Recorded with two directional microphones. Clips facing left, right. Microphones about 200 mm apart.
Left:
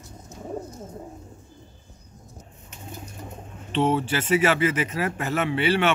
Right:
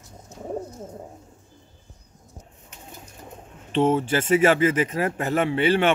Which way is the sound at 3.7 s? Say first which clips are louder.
Right 2 dB; 45° right (ahead or behind).